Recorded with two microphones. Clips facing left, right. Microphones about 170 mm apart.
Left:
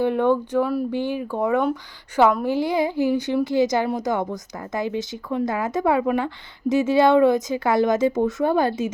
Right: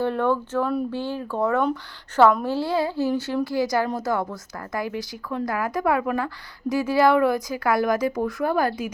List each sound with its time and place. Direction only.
0.0 s a woman's voice: 15° left (ahead or behind)